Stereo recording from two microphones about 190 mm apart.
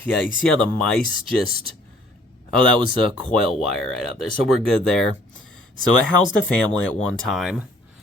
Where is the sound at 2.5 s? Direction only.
5° left (ahead or behind).